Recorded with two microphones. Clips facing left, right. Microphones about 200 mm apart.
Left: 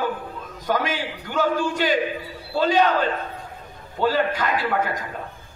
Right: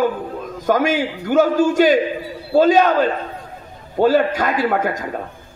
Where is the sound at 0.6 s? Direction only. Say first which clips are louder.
Right 7 dB; 45° right (ahead or behind).